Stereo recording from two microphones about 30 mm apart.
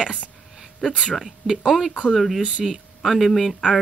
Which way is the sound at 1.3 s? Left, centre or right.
Centre.